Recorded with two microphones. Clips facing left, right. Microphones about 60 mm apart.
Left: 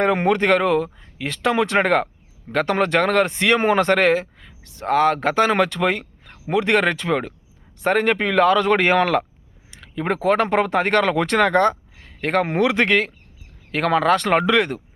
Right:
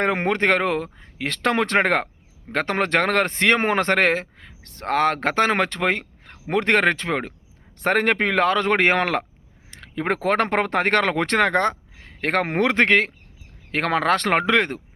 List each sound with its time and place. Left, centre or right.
0.0 s speech: right
7.8 s speech: right
9.6 s speech: right